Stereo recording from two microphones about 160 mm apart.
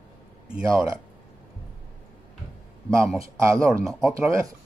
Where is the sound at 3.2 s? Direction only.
15° right (ahead or behind).